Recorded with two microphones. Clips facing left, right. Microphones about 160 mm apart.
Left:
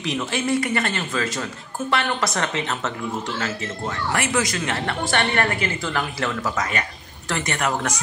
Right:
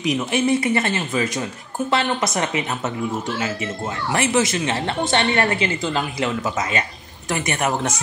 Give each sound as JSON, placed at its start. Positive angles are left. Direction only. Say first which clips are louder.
{"t": 0.0, "sound": "a woman's voice", "louder": "right 5 dB", "side_deg": -20}
{"t": 4.1, "sound": "a woman's voice", "louder": "right 5 dB", "side_deg": -25}